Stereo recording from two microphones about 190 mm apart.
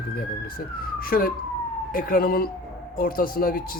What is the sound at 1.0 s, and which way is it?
Speech, 50° left (ahead or behind).